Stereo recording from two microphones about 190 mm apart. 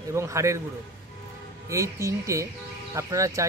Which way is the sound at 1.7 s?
15° right (ahead or behind).